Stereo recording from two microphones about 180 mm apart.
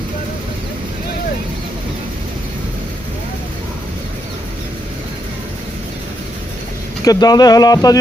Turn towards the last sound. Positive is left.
turn(degrees=20)  # may be behind; listen again after turning